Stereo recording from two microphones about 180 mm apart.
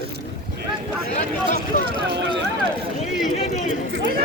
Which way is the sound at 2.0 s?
70° right (ahead or behind).